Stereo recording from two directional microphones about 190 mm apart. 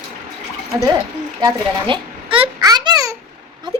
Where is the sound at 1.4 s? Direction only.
25° right (ahead or behind).